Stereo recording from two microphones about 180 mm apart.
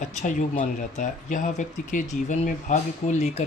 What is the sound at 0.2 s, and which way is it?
Speech, 45° left (ahead or behind).